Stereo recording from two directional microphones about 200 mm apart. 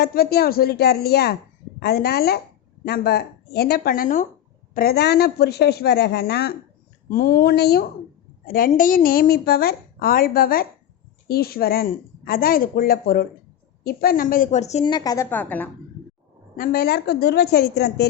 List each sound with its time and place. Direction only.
0.0 s a woman's voice: 50° left (ahead or behind); by 14.8 s 35° left (ahead or behind)
14.8 s a woman's voice: 20° left (ahead or behind)
16.6 s a woman's voice: 50° left (ahead or behind)